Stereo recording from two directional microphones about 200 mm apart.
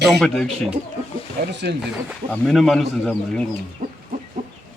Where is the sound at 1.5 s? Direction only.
55° right (ahead or behind).